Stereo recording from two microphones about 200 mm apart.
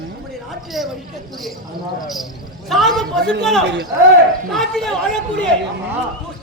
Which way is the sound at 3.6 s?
60° right (ahead or behind).